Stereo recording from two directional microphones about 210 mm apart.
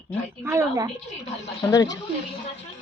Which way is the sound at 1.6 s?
15° left (ahead or behind).